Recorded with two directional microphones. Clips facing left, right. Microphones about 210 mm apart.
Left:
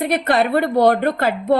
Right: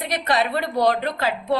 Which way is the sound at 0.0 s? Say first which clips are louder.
Left 5 dB; 55° left (ahead or behind).